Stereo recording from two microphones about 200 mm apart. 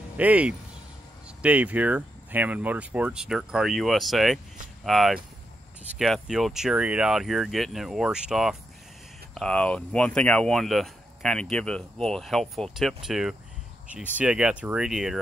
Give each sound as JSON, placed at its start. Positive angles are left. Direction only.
{"t": 0.2, "sound": "speech", "side_deg": -5}